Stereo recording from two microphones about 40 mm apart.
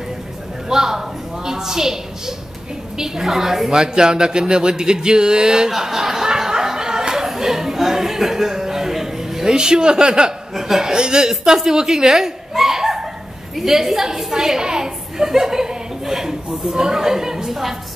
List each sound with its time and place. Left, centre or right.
0.7 s a woman's voice: centre
5.7 s a sound: centre
10.5 s chuckle: centre
13.6 s a woman's voice: centre